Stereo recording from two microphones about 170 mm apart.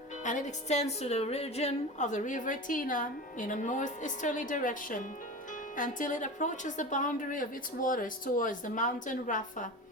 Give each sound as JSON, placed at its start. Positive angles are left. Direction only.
{"t": 0.2, "sound": "a woman's voice", "side_deg": 45}